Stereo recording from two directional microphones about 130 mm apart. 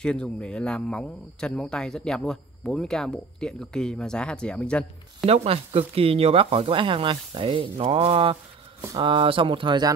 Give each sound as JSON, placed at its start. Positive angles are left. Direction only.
{"t": 0.0, "sound": "speech", "side_deg": 5}
{"t": 5.2, "sound": "speech", "side_deg": -50}